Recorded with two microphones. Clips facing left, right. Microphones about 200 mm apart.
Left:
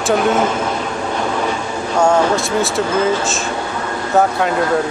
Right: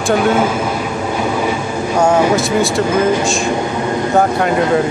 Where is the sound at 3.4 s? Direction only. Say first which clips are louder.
Right 5 dB; 15° right (ahead or behind).